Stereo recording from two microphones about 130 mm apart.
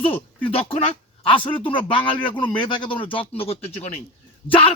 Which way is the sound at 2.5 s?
35° left (ahead or behind).